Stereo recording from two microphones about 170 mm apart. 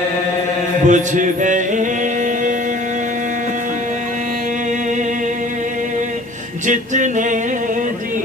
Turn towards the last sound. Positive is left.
turn(degrees=-45)  # may be behind; listen again after turning